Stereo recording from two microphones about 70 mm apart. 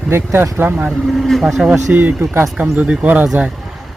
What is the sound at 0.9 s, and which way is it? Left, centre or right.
Speech, centre.